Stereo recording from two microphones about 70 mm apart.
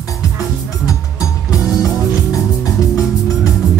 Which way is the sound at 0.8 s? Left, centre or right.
Left.